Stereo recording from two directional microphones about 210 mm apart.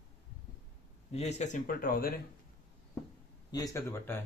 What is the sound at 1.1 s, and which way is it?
Speech, 30° left (ahead or behind).